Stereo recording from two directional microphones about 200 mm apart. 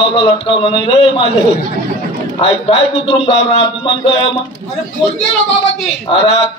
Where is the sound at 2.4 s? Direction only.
25° left (ahead or behind).